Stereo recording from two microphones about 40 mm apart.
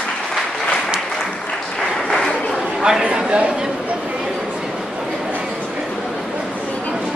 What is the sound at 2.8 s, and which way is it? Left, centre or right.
Speech, centre.